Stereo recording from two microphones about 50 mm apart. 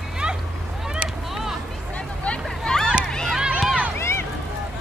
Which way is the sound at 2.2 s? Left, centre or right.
Centre.